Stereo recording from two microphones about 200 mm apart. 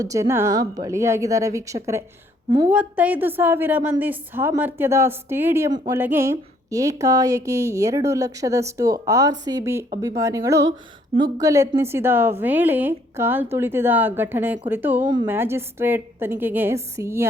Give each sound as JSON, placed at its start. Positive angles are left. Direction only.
{"t": 0.0, "sound": "a woman's voice", "side_deg": -15}
{"t": 2.7, "sound": "a woman's voice", "side_deg": -10}
{"t": 15.0, "sound": "a woman's voice", "side_deg": -20}
{"t": 15.3, "sound": "a woman's voice", "side_deg": -10}